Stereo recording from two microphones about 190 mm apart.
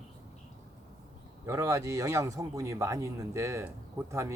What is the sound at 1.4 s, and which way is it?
Speech, 15° right (ahead or behind).